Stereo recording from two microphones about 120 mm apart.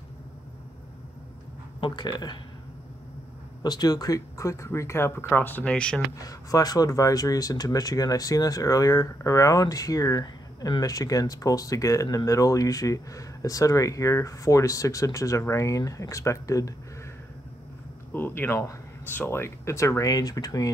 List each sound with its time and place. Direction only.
1.8 s speech: 40° left (ahead or behind)
3.6 s speech: 35° left (ahead or behind); by 6.0 s 10° left (ahead or behind)
6.2 s speech: 30° left (ahead or behind)
18.1 s speech: 20° left (ahead or behind)